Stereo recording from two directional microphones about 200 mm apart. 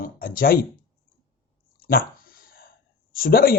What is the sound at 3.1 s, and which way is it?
Speech, 45° left (ahead or behind).